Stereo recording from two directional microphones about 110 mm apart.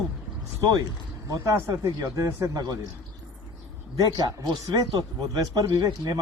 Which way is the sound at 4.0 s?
35° right (ahead or behind).